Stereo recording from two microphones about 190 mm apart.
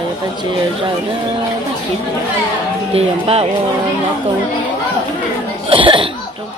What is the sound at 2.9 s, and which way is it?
Speech, 30° right (ahead or behind).